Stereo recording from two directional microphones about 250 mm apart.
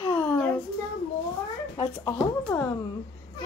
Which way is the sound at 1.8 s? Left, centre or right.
Centre.